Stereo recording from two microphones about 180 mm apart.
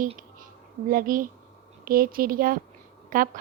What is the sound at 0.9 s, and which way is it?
A woman's voice, 50° right (ahead or behind).